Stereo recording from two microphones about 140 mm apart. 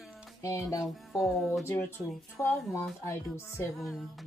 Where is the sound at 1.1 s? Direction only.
Centre (ahead or behind).